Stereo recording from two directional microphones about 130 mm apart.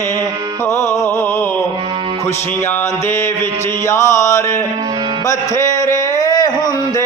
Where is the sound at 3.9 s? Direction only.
25° left (ahead or behind).